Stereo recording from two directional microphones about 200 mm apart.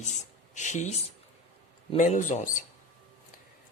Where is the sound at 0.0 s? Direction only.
35° left (ahead or behind).